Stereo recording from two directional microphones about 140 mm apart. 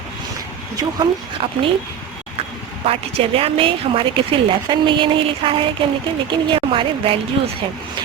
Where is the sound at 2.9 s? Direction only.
45° right (ahead or behind).